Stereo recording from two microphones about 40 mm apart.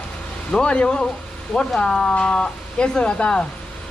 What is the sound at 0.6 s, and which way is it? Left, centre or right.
Speech, left.